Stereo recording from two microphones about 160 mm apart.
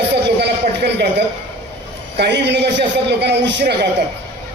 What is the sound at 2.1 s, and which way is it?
A man's voice, 90° right.